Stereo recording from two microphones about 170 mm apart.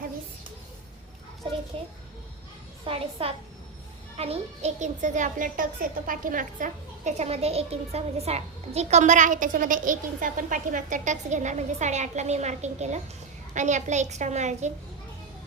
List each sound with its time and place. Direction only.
1.7 s a woman's voice: 35° right (ahead or behind)